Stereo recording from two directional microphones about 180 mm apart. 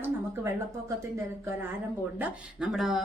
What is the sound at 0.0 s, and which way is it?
A woman's voice, 15° right (ahead or behind).